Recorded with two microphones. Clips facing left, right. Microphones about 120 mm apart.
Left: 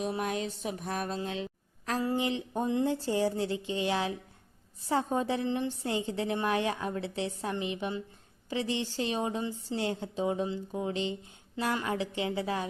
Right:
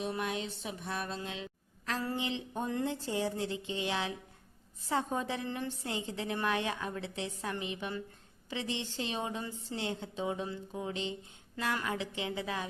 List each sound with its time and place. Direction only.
0.2 s a woman's voice: 40° left (ahead or behind)
2.0 s speech: 25° left (ahead or behind)
2.2 s a woman's voice: 40° left (ahead or behind)
11.5 s a woman's voice: 20° left (ahead or behind)